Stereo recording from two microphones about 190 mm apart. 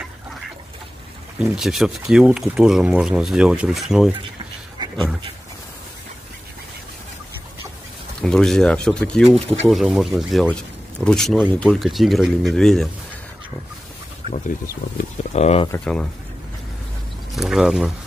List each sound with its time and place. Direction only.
1.4 s speech: 5° right (ahead or behind)
8.2 s speech: 5° left (ahead or behind)
14.2 s a sound: 30° right (ahead or behind)
15.0 s speech: 35° left (ahead or behind)
15.7 s speech: 5° left (ahead or behind)
17.3 s speech: centre (ahead or behind)